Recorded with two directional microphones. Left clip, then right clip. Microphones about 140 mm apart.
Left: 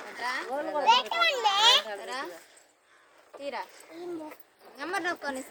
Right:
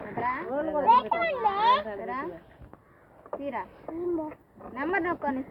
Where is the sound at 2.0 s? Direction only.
35° left (ahead or behind).